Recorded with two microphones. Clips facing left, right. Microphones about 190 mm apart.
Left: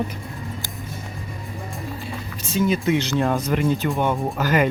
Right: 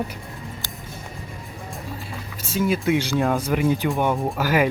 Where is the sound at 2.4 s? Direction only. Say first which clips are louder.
Left 1 dB; 5° right (ahead or behind).